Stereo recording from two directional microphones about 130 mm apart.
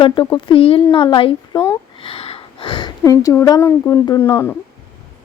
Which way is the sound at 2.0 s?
45° left (ahead or behind).